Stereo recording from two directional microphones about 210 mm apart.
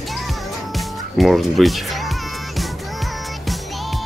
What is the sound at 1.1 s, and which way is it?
Speech, centre (ahead or behind).